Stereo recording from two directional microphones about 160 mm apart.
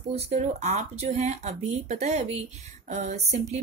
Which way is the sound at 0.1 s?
40° right (ahead or behind).